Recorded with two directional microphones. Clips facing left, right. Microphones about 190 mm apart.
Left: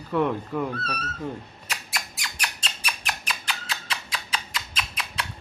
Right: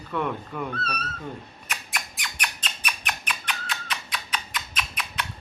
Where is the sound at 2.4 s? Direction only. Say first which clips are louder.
Even; 30° left (ahead or behind).